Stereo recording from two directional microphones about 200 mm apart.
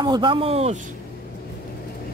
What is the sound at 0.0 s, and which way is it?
Speech, 20° right (ahead or behind).